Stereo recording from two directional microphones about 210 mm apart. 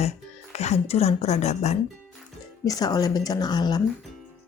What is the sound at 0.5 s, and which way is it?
Speech, 30° left (ahead or behind).